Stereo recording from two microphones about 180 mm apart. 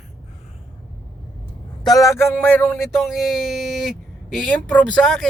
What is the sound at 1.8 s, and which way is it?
Speech, 20° left (ahead or behind).